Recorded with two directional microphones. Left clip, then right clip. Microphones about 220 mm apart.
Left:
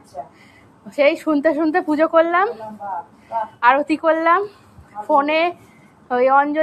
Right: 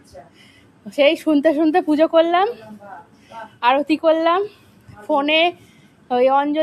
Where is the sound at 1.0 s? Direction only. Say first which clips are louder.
Right 1 dB; 30° right (ahead or behind).